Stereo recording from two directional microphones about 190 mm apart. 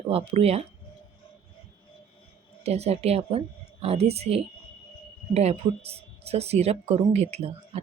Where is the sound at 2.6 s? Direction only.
35° right (ahead or behind).